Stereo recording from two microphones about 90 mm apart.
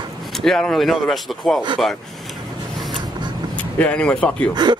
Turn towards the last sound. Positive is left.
turn(degrees=-55)  # may be behind; listen again after turning